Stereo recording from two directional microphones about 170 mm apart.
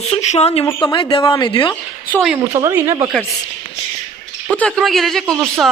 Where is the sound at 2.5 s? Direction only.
15° right (ahead or behind).